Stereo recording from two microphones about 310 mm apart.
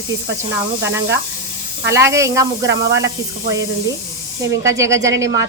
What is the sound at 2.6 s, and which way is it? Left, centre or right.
Speech, right.